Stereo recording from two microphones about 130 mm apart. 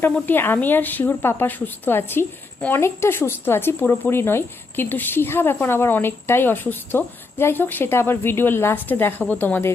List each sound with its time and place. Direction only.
0.0 s a woman's voice: 15° left (ahead or behind)